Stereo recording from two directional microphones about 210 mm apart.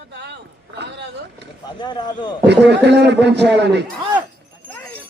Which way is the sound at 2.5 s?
55° right (ahead or behind).